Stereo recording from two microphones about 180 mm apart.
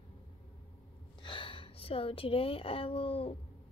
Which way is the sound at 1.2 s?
30° left (ahead or behind).